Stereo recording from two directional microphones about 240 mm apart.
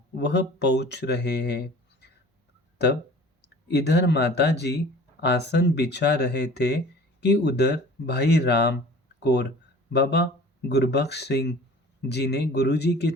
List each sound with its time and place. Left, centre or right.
0.2 s speech: left
3.4 s speech: left